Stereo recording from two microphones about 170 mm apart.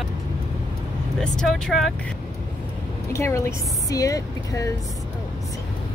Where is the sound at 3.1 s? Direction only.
15° left (ahead or behind).